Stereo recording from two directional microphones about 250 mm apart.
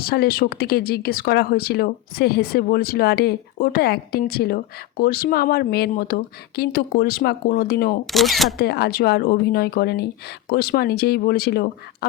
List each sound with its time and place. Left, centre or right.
0.0 s speech: left
8.0 s speech: centre
8.5 s speech: left